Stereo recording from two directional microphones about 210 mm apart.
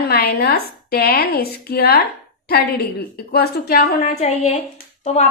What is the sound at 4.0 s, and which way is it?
A woman's voice, 30° left (ahead or behind).